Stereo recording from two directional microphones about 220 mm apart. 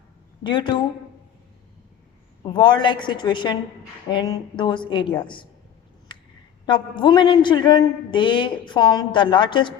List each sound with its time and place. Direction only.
0.4 s a man's voice: 20° left (ahead or behind)
2.4 s a man's voice: 20° left (ahead or behind)
6.7 s a man's voice: 20° left (ahead or behind)